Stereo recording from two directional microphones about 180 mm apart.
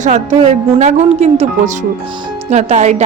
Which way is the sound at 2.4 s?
40° right (ahead or behind).